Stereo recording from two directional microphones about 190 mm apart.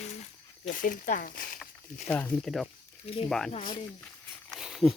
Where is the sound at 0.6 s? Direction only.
45° left (ahead or behind).